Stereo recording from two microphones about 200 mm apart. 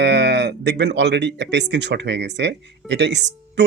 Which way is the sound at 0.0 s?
60° right (ahead or behind).